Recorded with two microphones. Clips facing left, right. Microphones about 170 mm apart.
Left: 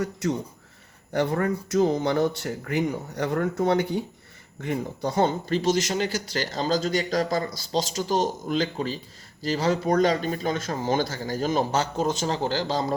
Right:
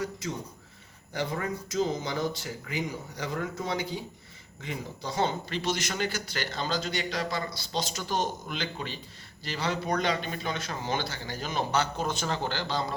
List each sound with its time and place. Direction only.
0.0 s speech: 65° left (ahead or behind); by 12.8 s 40° left (ahead or behind)